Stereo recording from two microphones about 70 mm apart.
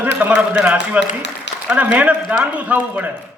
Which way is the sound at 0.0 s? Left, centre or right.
Right.